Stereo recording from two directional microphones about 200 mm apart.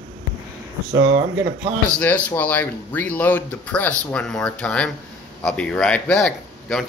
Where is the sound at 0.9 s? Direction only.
65° right (ahead or behind).